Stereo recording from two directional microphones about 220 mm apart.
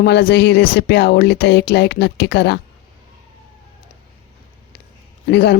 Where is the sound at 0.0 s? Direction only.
50° left (ahead or behind).